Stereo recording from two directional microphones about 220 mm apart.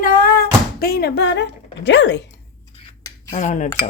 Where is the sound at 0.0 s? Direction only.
40° left (ahead or behind).